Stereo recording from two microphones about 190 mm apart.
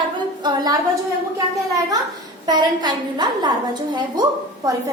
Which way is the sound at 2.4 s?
20° right (ahead or behind).